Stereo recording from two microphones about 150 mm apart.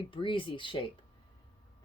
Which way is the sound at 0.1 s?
35° left (ahead or behind).